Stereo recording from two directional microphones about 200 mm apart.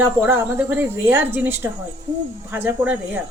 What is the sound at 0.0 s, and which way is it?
A woman's voice, 10° right (ahead or behind).